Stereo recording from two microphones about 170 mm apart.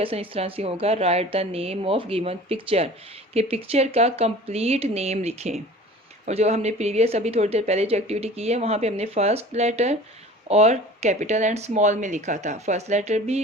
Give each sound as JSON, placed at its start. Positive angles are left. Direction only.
{"t": 0.0, "sound": "speech", "side_deg": -35}